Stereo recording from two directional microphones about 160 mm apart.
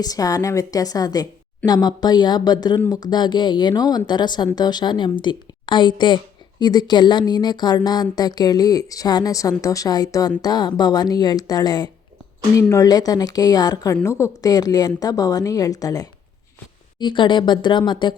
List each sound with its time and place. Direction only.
0.0 s speech: 20° left (ahead or behind)